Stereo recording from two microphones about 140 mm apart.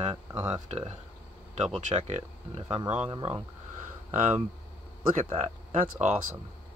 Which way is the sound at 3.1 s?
35° right (ahead or behind).